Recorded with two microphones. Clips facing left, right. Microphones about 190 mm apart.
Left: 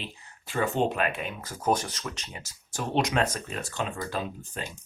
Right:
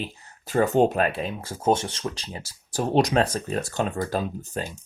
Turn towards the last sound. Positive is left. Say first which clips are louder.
# right 6 dB
turn(degrees=-40)  # may be behind; listen again after turning